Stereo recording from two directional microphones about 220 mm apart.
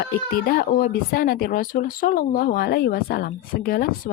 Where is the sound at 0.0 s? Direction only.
40° left (ahead or behind).